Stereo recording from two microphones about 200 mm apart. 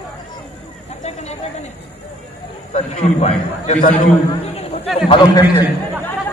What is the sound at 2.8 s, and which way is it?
A man's voice, 35° left (ahead or behind).